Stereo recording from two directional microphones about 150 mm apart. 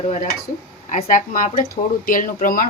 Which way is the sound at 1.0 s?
65° left (ahead or behind).